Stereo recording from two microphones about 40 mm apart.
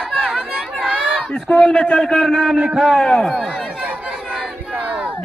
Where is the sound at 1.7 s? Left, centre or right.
Left.